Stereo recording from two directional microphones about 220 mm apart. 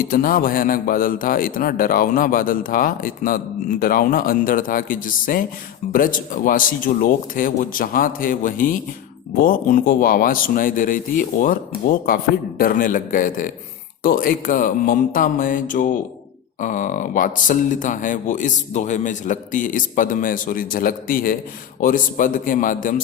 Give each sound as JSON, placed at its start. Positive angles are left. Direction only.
{"t": 0.0, "sound": "a man's voice", "side_deg": 40}